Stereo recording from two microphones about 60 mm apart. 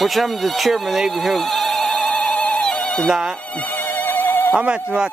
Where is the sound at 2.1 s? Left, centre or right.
Left.